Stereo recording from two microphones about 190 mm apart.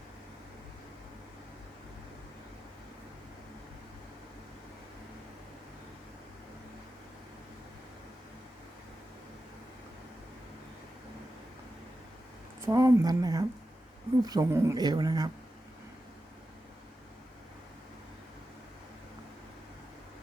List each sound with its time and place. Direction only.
12.6 s a woman's voice: 15° right (ahead or behind)